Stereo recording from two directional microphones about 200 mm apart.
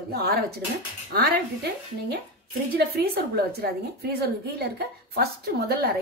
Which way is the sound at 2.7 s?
50° right (ahead or behind).